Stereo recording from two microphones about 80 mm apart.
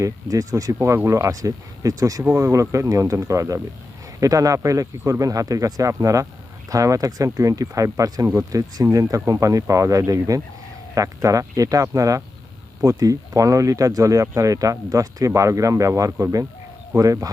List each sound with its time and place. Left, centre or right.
0.0 s speech: right